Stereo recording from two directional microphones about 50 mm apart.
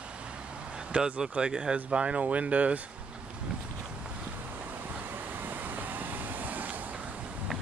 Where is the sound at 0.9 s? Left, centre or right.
Right.